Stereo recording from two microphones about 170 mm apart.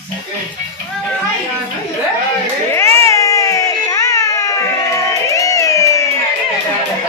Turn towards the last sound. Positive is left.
turn(degrees=20)  # may be behind; listen again after turning